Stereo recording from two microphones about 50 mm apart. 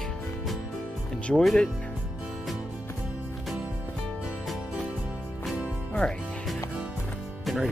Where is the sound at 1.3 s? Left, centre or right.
Centre.